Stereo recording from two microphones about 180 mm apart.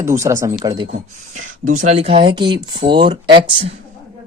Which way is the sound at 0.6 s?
25° right (ahead or behind).